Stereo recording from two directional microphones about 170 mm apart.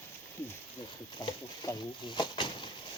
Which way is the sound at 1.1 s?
25° left (ahead or behind).